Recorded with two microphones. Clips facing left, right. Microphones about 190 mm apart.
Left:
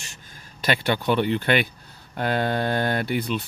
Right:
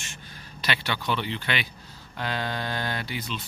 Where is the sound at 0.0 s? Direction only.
45° left (ahead or behind).